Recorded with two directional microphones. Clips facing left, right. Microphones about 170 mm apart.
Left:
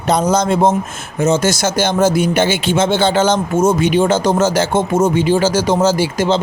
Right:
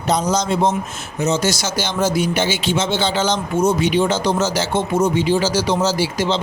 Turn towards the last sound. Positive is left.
turn(degrees=50)  # may be behind; listen again after turning